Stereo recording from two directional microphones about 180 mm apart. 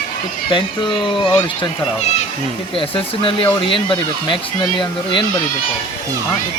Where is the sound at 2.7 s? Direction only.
30° left (ahead or behind).